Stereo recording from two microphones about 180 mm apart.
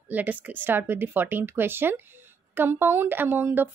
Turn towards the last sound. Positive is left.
turn(degrees=-10)  # may be behind; listen again after turning